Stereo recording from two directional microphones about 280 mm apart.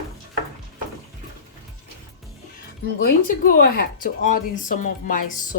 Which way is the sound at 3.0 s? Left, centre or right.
Left.